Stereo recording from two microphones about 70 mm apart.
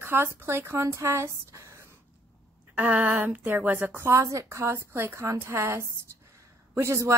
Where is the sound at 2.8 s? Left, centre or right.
Right.